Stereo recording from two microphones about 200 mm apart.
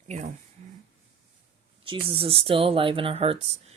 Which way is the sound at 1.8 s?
25° right (ahead or behind).